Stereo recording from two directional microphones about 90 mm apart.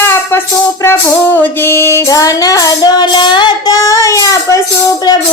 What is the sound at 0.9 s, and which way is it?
Female singing, 20° left (ahead or behind).